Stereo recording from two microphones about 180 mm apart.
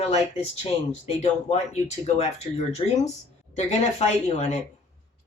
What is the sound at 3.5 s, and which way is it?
Speech, 40° left (ahead or behind).